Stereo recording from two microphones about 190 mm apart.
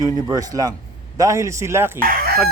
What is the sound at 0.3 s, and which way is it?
Speech, 20° right (ahead or behind).